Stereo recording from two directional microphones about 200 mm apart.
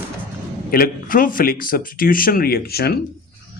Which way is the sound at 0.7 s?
45° left (ahead or behind).